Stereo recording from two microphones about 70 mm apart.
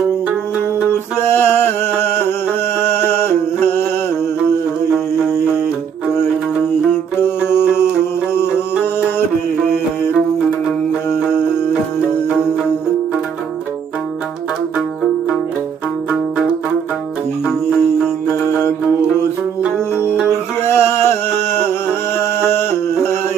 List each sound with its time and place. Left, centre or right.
1.2 s music: left
2.8 s a sound: left
7.2 s music: left
17.5 s music: centre
19.6 s music: centre
20.6 s music: left
22.2 s a sound: left